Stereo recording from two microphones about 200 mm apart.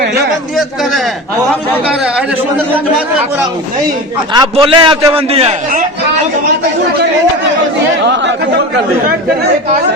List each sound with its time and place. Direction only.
4.4 s a man's voice: 25° right (ahead or behind)